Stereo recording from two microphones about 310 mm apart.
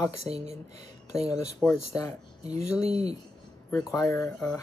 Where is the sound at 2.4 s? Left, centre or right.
Right.